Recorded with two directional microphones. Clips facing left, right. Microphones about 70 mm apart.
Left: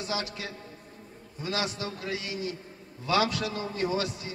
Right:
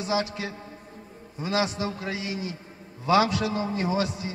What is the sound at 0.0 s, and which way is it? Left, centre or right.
A man's voice, right.